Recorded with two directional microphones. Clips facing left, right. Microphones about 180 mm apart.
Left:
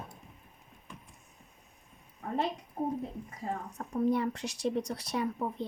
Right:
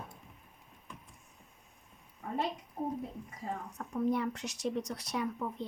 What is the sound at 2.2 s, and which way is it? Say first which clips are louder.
Speech: left 3 dB; 60° left (ahead or behind).